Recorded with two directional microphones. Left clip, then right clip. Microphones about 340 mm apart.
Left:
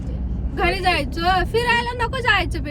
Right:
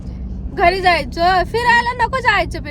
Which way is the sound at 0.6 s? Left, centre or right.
Right.